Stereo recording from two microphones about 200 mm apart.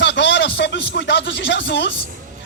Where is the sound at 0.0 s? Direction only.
60° left (ahead or behind).